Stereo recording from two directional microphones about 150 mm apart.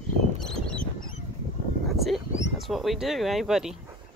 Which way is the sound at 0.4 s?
5° left (ahead or behind).